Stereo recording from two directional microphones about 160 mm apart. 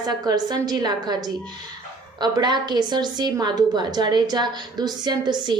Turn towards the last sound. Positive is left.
turn(degrees=-25)  # may be behind; listen again after turning